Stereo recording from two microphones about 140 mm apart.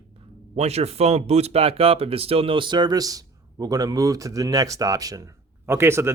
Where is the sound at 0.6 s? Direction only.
45° right (ahead or behind).